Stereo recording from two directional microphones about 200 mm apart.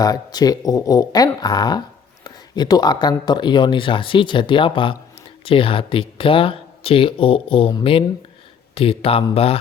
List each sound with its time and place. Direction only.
0.0 s speech: 20° left (ahead or behind)